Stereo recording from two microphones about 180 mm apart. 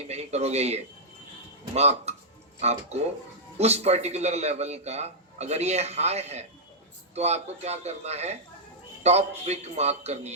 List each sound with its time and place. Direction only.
0.1 s a man's voice: 35° right (ahead or behind)